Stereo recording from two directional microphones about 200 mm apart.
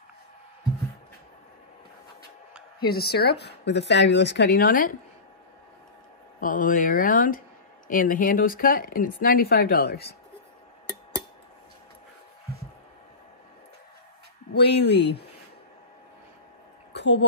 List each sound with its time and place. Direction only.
2.8 s speech: 50° left (ahead or behind)
6.4 s speech: 45° left (ahead or behind)
14.5 s speech: 55° left (ahead or behind)
16.9 s a sound: 60° left (ahead or behind)